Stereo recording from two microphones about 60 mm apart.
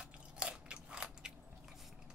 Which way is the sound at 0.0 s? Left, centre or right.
Centre.